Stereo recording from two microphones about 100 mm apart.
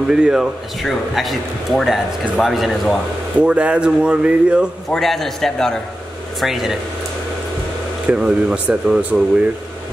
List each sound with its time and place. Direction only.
0.1 s speech: 5° right (ahead or behind)
3.3 s speech: 10° right (ahead or behind)
4.9 s speech: centre (ahead or behind)
8.1 s speech: 10° right (ahead or behind)